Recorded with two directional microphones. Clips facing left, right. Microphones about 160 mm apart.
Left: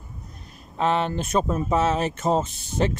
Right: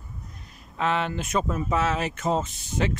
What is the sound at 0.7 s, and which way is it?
Speech, 30° left (ahead or behind).